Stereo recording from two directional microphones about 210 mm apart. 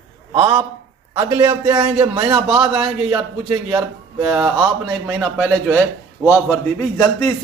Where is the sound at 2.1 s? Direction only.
25° right (ahead or behind).